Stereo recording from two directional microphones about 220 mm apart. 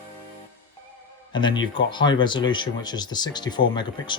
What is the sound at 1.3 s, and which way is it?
Speech, 20° left (ahead or behind).